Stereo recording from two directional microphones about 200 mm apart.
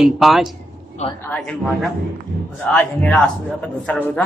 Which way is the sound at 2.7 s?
5° left (ahead or behind).